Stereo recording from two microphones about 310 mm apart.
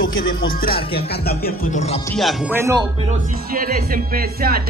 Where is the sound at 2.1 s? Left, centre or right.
Centre.